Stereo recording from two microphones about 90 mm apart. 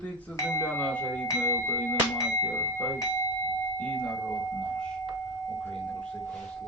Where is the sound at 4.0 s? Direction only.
15° left (ahead or behind).